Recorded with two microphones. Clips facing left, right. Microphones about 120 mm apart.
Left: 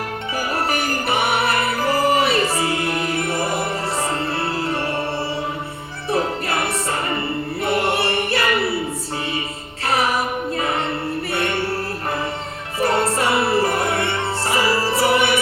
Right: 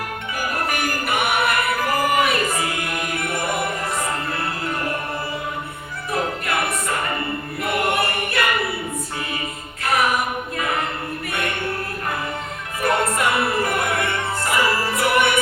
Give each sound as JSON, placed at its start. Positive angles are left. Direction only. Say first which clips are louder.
{"t": 0.7, "sound": "music", "louder": "left 2 dB", "side_deg": 30}
{"t": 6.1, "sound": "music", "louder": "left 3 dB", "side_deg": 30}
{"t": 7.6, "sound": "choir", "louder": "left 1 dB", "side_deg": 30}
{"t": 9.8, "sound": "music", "louder": "even", "side_deg": 30}
{"t": 12.8, "sound": "music", "louder": "left 1 dB", "side_deg": 30}